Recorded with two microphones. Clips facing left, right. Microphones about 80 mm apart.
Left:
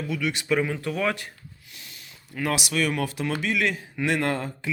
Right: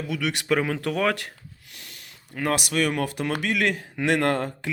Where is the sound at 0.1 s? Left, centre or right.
Right.